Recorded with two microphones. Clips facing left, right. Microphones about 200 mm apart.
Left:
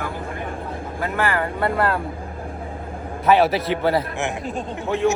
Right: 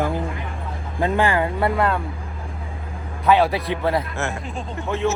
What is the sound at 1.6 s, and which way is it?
Speech, centre (ahead or behind).